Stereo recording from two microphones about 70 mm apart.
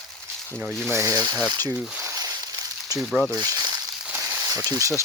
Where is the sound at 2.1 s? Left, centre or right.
Right.